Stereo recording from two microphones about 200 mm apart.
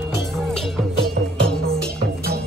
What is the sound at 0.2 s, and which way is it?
Music, centre (ahead or behind).